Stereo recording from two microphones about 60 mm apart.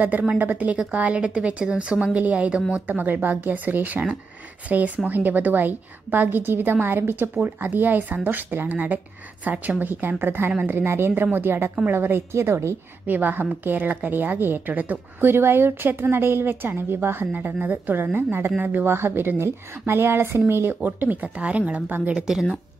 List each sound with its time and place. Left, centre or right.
0.4 s a woman's voice: right
2.9 s a woman's voice: right
13.0 s a woman's voice: right
17.3 s a woman's voice: right
22.1 s speech: centre